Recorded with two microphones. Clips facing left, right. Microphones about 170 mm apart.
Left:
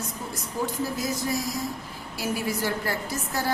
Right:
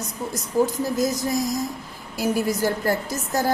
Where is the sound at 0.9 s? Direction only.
45° right (ahead or behind).